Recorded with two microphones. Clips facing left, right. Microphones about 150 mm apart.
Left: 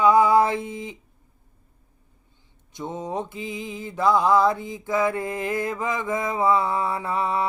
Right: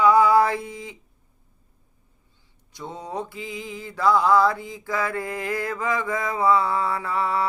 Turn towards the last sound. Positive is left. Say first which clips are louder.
# even
turn(degrees=20)  # may be behind; listen again after turning